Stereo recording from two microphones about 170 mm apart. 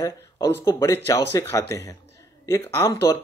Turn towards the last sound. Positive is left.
turn(degrees=15)  # may be behind; listen again after turning